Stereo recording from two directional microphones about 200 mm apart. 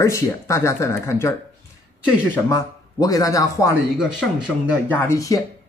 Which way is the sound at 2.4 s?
15° left (ahead or behind).